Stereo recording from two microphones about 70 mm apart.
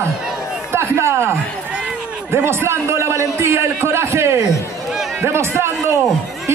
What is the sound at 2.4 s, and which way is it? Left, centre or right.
A man's voice, right.